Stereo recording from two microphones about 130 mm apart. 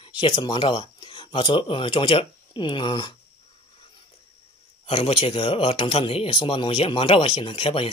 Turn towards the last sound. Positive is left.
turn(degrees=45)  # may be behind; listen again after turning